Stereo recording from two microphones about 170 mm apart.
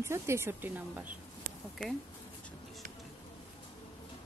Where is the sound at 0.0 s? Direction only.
15° right (ahead or behind).